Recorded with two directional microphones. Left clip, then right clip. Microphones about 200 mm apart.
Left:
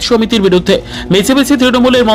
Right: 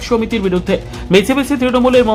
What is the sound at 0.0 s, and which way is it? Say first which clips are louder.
Speech: left 5 dB; 25° left (ahead or behind).